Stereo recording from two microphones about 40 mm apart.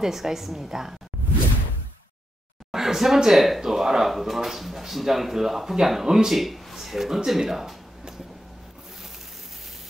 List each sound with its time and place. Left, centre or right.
0.0 s a woman's voice: centre
2.7 s a woman's voice: centre